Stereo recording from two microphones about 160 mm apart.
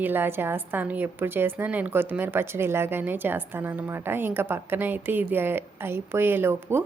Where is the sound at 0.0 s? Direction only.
15° right (ahead or behind).